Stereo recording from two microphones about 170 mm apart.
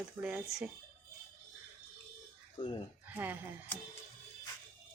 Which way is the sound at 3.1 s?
10° right (ahead or behind).